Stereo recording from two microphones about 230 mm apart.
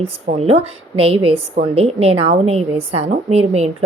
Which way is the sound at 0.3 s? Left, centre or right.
Right.